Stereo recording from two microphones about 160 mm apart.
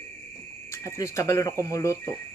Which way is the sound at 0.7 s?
20° left (ahead or behind).